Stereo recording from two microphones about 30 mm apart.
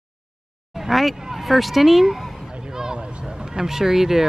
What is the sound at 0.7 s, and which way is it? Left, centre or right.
Speech, centre.